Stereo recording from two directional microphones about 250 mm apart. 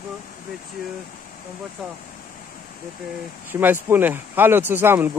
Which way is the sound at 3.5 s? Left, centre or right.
Centre.